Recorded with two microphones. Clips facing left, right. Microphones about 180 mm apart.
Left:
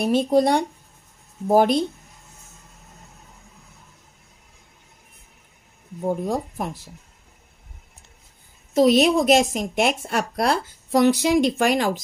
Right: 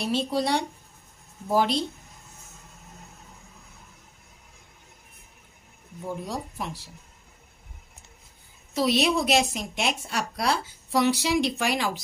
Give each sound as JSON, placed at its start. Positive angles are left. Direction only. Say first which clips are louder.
{"t": 0.0, "sound": "speech", "louder": "left 8 dB", "side_deg": 50}
{"t": 5.9, "sound": "speech", "louder": "left 9 dB", "side_deg": 50}
{"t": 8.7, "sound": "speech", "louder": "left 7 dB", "side_deg": 45}